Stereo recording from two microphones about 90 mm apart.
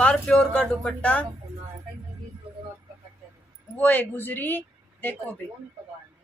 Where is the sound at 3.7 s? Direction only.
20° left (ahead or behind).